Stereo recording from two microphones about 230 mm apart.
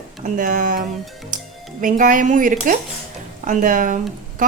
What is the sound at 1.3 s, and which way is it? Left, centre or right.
Music, right.